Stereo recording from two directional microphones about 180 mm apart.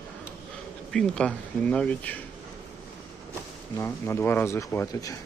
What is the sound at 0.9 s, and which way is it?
Speech, 5° left (ahead or behind).